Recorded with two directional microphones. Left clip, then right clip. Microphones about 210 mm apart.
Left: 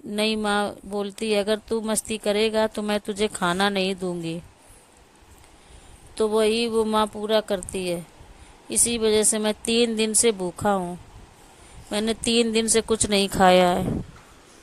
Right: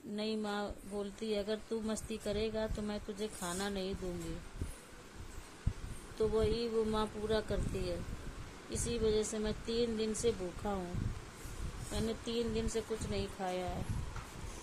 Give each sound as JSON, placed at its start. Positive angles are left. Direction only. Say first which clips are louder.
{"t": 0.2, "sound": "speech", "louder": "left 16 dB", "side_deg": 45}
{"t": 6.1, "sound": "speech", "louder": "left 12 dB", "side_deg": 45}
{"t": 11.9, "sound": "speech", "louder": "left 15 dB", "side_deg": 45}